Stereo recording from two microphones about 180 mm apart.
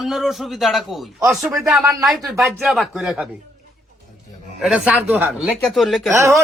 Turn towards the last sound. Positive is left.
turn(degrees=-15)  # may be behind; listen again after turning